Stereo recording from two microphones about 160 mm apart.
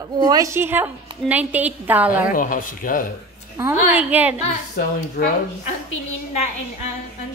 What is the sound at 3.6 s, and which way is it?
Speech, 15° right (ahead or behind).